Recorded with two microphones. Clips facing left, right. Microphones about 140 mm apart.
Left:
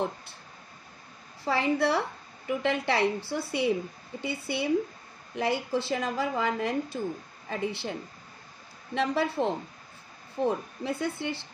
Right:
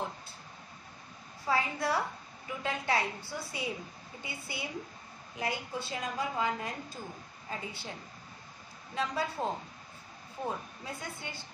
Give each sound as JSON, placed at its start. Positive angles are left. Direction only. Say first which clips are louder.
{"t": 1.4, "sound": "a woman's voice", "louder": "left 6 dB", "side_deg": 80}
{"t": 8.9, "sound": "a woman's voice", "louder": "left 7 dB", "side_deg": 70}